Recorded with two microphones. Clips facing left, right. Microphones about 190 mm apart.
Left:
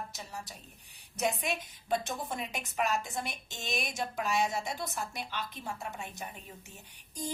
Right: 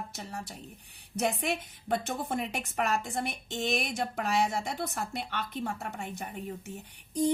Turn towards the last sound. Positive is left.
turn(degrees=-60)  # may be behind; listen again after turning